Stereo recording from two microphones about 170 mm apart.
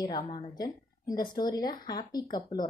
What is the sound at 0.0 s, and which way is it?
Speech, 25° left (ahead or behind).